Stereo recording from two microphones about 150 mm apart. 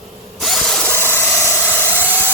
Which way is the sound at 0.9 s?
15° left (ahead or behind).